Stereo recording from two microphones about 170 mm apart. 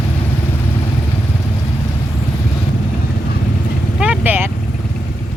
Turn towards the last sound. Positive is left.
turn(degrees=-10)  # may be behind; listen again after turning